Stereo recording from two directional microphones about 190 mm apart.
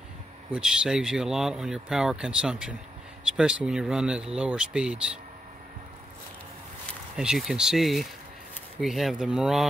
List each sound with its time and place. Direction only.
0.5 s speech: 5° right (ahead or behind)
7.2 s speech: centre (ahead or behind)